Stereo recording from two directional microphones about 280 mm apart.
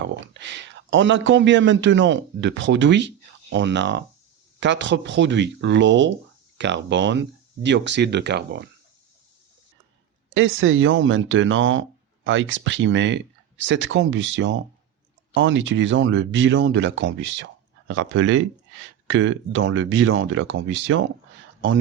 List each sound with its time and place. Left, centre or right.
0.3 s a man's voice: right
10.3 s speech: right